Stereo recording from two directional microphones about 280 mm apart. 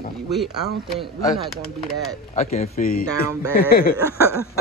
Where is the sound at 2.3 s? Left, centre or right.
Left.